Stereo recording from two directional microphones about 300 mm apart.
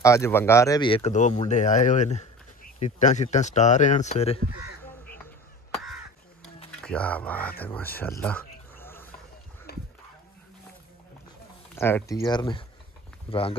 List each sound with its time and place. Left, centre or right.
0.0 s speech: centre
4.8 s crow: centre
6.8 s speech: centre
7.6 s a sound: centre
9.7 s music: left
11.7 s speech: centre